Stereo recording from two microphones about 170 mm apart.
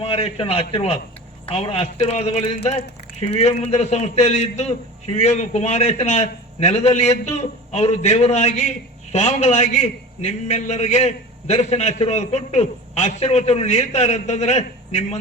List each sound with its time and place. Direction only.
0.0 s a man's voice: 35° left (ahead or behind)